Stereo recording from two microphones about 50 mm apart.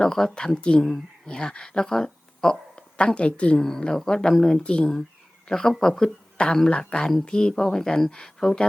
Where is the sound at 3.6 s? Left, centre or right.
Centre.